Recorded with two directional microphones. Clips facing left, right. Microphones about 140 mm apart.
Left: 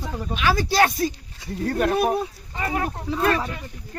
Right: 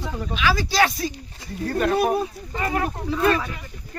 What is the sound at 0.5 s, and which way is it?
Speech, 50° left (ahead or behind).